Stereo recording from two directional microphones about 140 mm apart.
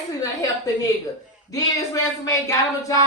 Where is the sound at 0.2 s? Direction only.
25° left (ahead or behind).